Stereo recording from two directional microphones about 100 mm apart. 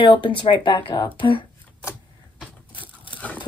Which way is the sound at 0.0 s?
60° left (ahead or behind).